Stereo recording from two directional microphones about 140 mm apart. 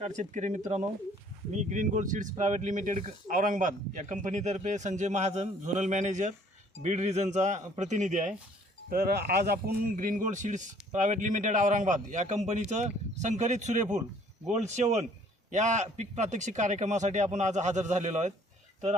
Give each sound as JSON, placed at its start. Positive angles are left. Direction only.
{"t": 0.2, "sound": "a man's voice", "side_deg": -60}
{"t": 1.7, "sound": "a man's voice", "side_deg": -65}
{"t": 8.9, "sound": "a man's voice", "side_deg": -90}